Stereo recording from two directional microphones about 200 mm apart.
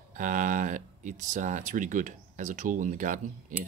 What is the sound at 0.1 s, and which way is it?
Speech, 40° right (ahead or behind).